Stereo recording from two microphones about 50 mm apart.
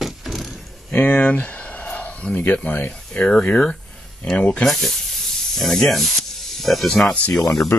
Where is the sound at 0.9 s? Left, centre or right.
Left.